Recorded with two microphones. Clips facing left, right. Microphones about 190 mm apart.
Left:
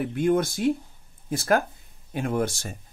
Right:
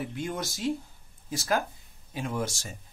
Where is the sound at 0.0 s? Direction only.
55° left (ahead or behind).